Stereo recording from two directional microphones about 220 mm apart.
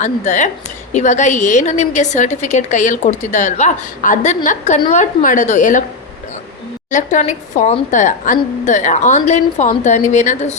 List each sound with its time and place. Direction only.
0.0 s a woman's voice: 35° left (ahead or behind)
6.9 s a woman's voice: 35° left (ahead or behind)